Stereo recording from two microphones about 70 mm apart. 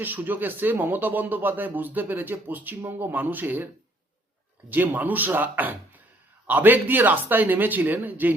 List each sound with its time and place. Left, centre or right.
0.0 s speech: right
4.7 s speech: right